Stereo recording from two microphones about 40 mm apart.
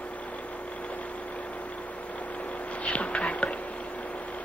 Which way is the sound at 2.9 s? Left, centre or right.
Left.